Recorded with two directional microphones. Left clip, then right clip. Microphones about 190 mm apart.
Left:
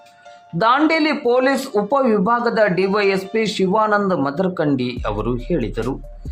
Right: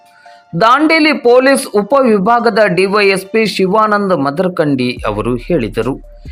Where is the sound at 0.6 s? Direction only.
20° right (ahead or behind).